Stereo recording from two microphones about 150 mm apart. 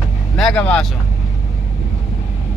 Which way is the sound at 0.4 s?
5° left (ahead or behind).